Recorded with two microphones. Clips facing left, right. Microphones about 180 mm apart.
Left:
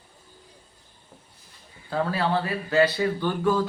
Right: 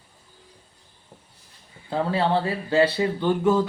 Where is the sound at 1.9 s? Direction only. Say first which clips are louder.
Right 2 dB; 25° right (ahead or behind).